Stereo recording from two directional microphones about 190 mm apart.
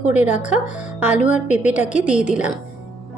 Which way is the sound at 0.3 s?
40° left (ahead or behind).